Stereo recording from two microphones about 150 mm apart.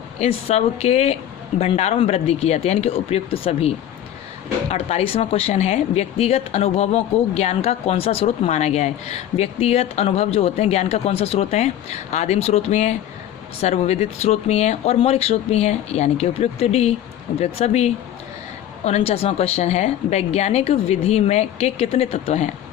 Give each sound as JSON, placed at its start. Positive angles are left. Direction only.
{"t": 0.2, "sound": "speech", "side_deg": 45}
{"t": 4.7, "sound": "speech", "side_deg": 40}